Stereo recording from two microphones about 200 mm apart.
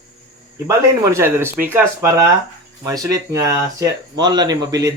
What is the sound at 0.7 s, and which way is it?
Speech, 10° right (ahead or behind).